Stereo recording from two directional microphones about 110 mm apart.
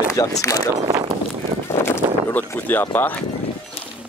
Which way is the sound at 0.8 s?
40° right (ahead or behind).